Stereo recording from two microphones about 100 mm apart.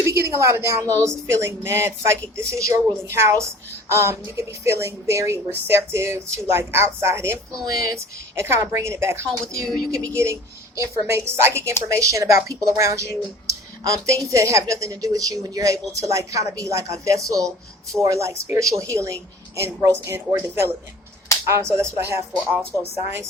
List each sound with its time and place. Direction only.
0.0 s a woman's voice: 30° right (ahead or behind)